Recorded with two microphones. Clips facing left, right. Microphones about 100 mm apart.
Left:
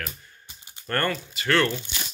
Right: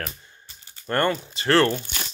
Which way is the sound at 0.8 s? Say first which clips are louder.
Right 4 dB; 20° right (ahead or behind).